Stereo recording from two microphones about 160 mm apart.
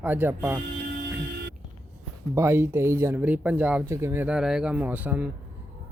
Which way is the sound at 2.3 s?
15° right (ahead or behind).